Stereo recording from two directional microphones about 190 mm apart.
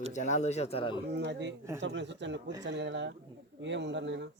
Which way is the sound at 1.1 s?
65° right (ahead or behind).